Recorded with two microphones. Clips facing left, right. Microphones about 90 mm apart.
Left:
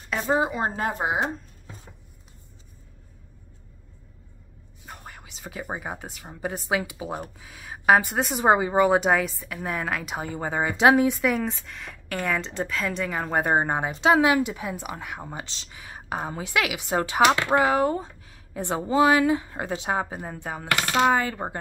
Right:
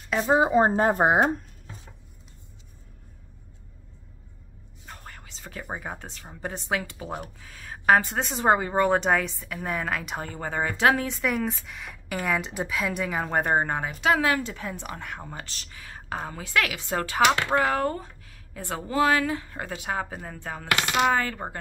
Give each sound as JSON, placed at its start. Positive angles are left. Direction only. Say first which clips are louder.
{"t": 0.3, "sound": "a woman's voice", "louder": "right 4 dB", "side_deg": -25}
{"t": 1.0, "sound": "speech", "louder": "right 5 dB", "side_deg": -50}
{"t": 4.8, "sound": "speech", "louder": "left 2 dB", "side_deg": 10}
{"t": 11.1, "sound": "speech", "louder": "left 3 dB", "side_deg": 0}